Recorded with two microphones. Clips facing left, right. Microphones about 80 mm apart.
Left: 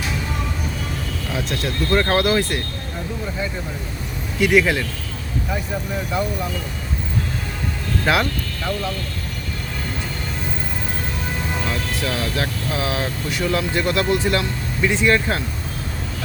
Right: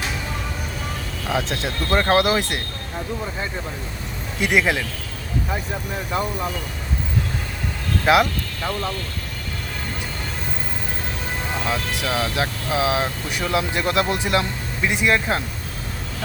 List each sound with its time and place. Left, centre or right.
1.3 s speech: right
4.4 s speech: centre
8.0 s speech: centre
11.7 s speech: centre